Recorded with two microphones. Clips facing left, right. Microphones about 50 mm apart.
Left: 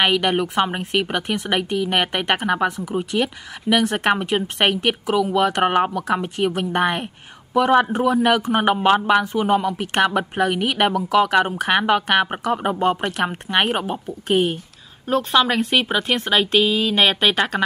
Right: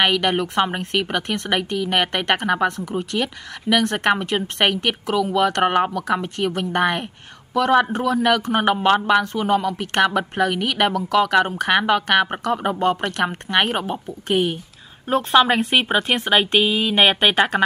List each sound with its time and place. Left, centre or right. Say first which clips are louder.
0.0 s speech: even; centre
15.0 s speech: right 2 dB; centre